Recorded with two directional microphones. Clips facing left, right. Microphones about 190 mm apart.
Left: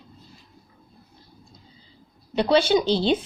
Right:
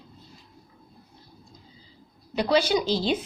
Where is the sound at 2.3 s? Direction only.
30° left (ahead or behind).